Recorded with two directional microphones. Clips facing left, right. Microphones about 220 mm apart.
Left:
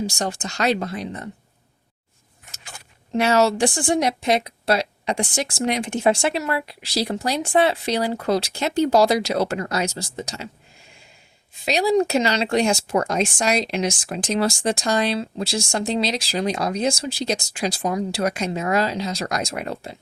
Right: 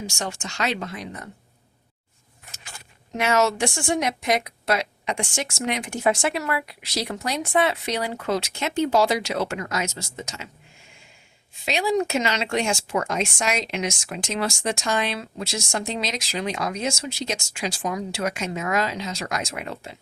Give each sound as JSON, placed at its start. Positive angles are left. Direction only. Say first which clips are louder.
{"t": 0.0, "sound": "speech", "louder": "left 5 dB", "side_deg": 35}
{"t": 3.2, "sound": "speech", "louder": "left 4 dB", "side_deg": 35}
{"t": 11.6, "sound": "speech", "louder": "left 4 dB", "side_deg": 35}